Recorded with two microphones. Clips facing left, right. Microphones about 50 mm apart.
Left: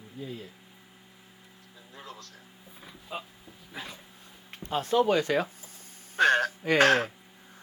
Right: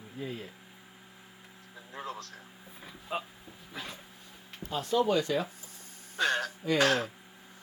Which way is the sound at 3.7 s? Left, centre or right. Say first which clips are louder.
Left 1 dB; centre.